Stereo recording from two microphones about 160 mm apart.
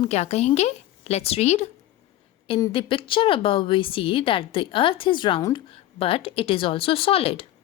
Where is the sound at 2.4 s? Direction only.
30° left (ahead or behind).